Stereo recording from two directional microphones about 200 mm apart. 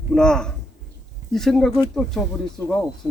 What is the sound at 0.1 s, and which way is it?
Speech, 5° left (ahead or behind).